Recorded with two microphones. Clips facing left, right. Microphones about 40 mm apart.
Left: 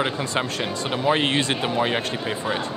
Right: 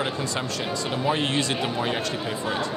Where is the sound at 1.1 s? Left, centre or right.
Left.